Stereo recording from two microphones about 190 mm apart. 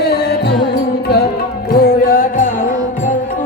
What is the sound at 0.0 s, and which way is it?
Music, 60° left (ahead or behind).